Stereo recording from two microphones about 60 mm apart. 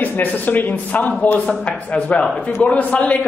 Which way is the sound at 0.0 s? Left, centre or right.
Left.